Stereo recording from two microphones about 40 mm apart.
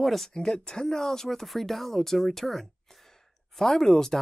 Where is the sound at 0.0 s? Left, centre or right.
Centre.